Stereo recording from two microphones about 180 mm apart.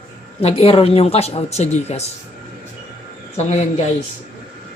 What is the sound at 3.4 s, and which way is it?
Speech, 40° left (ahead or behind).